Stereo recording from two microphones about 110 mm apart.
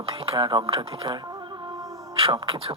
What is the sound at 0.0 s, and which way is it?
Speech, 50° right (ahead or behind).